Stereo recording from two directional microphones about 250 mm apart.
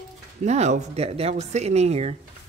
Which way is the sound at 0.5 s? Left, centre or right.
Right.